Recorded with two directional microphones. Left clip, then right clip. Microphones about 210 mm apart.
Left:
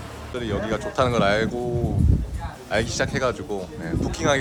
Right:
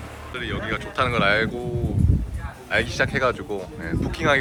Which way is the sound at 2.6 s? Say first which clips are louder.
Right 2 dB; 10° left (ahead or behind).